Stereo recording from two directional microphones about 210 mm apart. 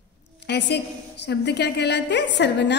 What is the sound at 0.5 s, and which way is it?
A woman's voice, 55° left (ahead or behind).